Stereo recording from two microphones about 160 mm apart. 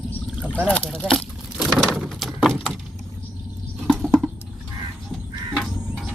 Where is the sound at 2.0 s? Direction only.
Centre (ahead or behind).